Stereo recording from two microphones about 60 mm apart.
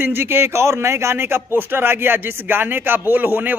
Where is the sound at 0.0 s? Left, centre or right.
Right.